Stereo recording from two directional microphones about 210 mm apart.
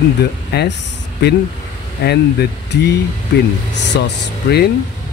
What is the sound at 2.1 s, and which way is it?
Speech, 55° left (ahead or behind).